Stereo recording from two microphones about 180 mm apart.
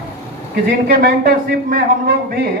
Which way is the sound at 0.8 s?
55° right (ahead or behind).